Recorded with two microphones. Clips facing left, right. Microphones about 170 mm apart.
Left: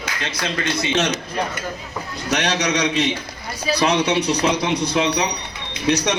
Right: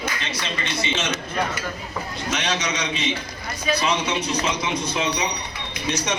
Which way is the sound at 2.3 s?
70° left (ahead or behind).